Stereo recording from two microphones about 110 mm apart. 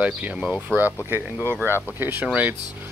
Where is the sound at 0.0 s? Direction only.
10° right (ahead or behind).